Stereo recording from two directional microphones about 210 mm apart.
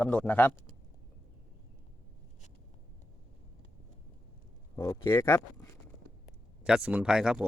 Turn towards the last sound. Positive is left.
turn(degrees=-5)  # may be behind; listen again after turning